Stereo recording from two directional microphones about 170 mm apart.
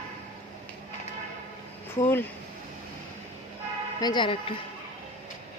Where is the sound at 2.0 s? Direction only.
15° left (ahead or behind).